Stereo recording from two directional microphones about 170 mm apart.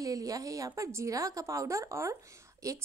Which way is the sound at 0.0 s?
20° right (ahead or behind).